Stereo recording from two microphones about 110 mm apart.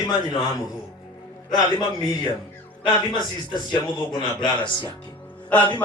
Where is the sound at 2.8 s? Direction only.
45° left (ahead or behind).